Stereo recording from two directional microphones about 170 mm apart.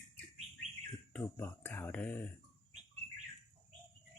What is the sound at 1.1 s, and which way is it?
Speech, 10° left (ahead or behind).